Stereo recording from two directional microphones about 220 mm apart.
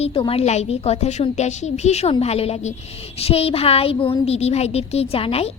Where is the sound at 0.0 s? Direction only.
25° left (ahead or behind).